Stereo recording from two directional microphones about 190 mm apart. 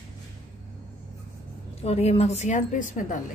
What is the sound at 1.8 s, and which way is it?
A woman's voice, 35° left (ahead or behind).